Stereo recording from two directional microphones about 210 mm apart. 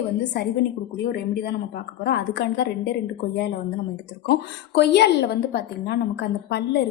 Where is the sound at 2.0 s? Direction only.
50° left (ahead or behind).